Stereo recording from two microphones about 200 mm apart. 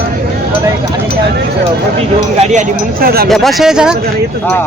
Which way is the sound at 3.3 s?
Centre (ahead or behind).